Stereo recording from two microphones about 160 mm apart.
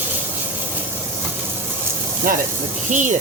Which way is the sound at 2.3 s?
60° right (ahead or behind).